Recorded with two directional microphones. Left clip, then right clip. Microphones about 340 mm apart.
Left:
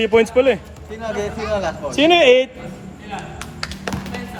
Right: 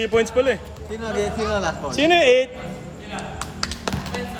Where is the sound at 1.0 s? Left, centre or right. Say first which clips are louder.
Even; centre.